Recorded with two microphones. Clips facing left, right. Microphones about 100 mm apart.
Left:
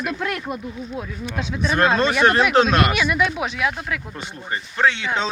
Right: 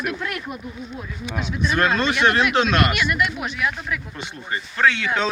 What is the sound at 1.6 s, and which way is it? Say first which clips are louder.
Speech: left 2 dB; 35° left (ahead or behind).